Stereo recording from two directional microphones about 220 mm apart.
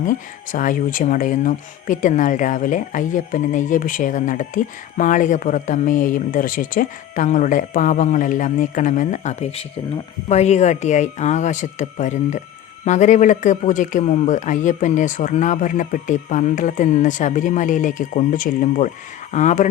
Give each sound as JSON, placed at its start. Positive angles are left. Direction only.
{"t": 0.0, "sound": "speech", "side_deg": 35}